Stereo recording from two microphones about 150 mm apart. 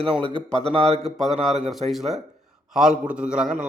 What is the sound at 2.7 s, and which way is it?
Speech, 5° right (ahead or behind).